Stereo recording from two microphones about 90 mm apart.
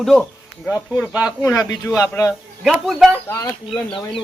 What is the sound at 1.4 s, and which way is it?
Speech, 35° left (ahead or behind).